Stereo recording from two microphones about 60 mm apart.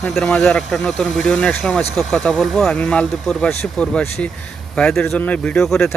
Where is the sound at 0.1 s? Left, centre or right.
Centre.